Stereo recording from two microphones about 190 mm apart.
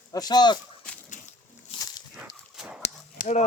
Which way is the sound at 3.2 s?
40° left (ahead or behind).